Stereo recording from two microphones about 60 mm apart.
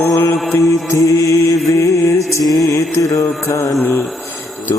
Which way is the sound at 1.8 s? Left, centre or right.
Left.